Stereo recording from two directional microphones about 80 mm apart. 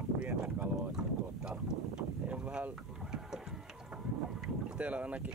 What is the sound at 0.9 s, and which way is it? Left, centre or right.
Boat, centre.